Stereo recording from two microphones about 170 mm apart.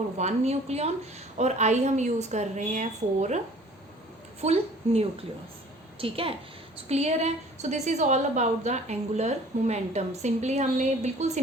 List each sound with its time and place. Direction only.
0.2 s a woman's voice: 40° right (ahead or behind)